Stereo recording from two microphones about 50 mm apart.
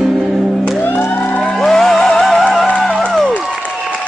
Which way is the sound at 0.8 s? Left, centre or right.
Left.